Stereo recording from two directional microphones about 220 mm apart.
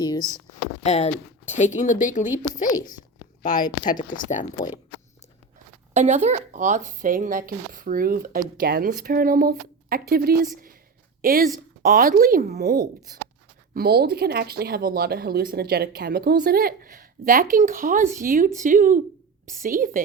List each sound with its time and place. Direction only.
0.0 s speech: 20° left (ahead or behind)
0.6 s speech: 30° left (ahead or behind)
2.7 s speech: 20° left (ahead or behind)
5.9 s a woman's voice: 30° right (ahead or behind)